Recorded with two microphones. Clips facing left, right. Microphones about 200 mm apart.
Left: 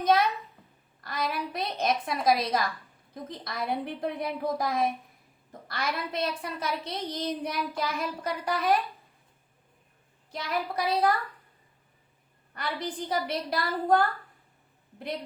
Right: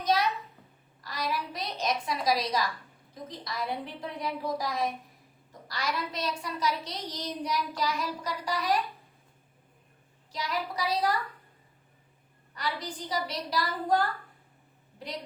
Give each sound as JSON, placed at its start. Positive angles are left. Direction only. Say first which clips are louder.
{"t": 1.0, "sound": "a woman's voice", "louder": "left 2 dB", "side_deg": 55}
{"t": 10.3, "sound": "a woman's voice", "louder": "left 2 dB", "side_deg": 55}
{"t": 12.5, "sound": "a woman's voice", "louder": "left 2 dB", "side_deg": 55}